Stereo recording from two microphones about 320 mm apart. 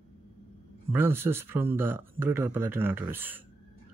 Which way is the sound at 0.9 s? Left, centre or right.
Centre.